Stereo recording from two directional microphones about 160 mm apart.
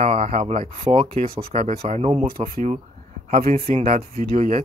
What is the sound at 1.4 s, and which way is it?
Speech, 65° right (ahead or behind).